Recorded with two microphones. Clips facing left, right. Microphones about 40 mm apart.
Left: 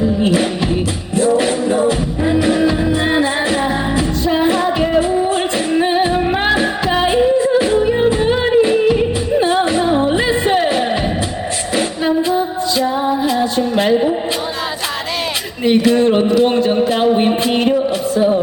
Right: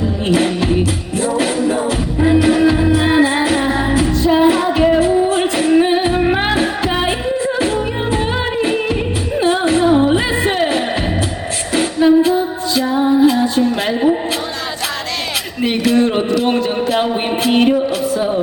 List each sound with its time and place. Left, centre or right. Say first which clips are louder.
1.2 s music: left 2 dB; centre
9.4 s music: right 3 dB; centre
11.8 s singing: right 6 dB; centre
12.2 s music: right 1 dB; centre
13.3 s a sound: even; centre
15.6 s speech: left 2 dB; centre